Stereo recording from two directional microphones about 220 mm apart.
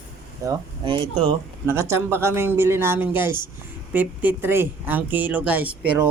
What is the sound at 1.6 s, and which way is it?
Speech, 10° right (ahead or behind).